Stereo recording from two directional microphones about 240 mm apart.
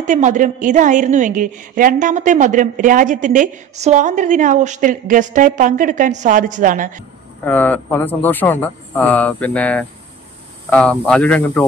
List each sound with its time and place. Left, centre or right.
0.0 s a woman's voice: right
7.4 s speech: centre